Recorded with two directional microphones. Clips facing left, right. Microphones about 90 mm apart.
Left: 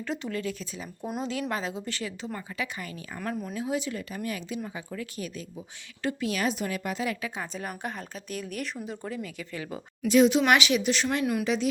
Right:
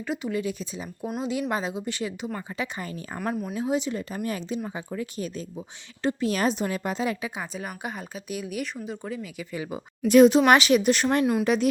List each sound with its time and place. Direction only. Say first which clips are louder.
0.0 s speech: right 3 dB; 10° right (ahead or behind)
2.7 s speech: right 4 dB; 30° right (ahead or behind)
7.3 s speech: right 1 dB; 5° right (ahead or behind)
10.1 s speech: right 5 dB; 50° right (ahead or behind)
10.3 s speech: right 4 dB; 40° right (ahead or behind); by 11.7 s 55° right (ahead or behind)